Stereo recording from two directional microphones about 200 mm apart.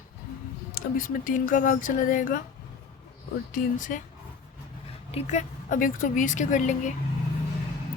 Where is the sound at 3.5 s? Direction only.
40° left (ahead or behind).